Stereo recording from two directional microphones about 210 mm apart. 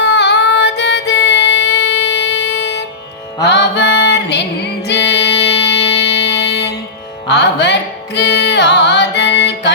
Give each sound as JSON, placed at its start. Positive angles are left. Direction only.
{"t": 0.0, "sound": "music", "side_deg": 55}
{"t": 3.4, "sound": "mantra", "side_deg": 55}
{"t": 4.9, "sound": "music", "side_deg": 55}